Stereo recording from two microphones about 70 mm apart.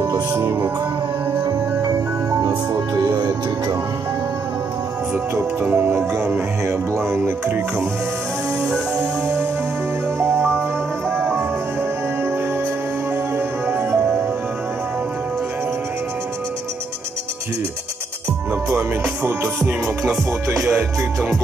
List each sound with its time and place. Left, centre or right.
1.4 s music: right
2.4 s speech: right
5.3 s music: right
8.9 s music: right
13.7 s music: right
19.4 s music: centre